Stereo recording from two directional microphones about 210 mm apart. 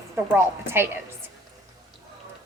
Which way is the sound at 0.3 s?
10° right (ahead or behind).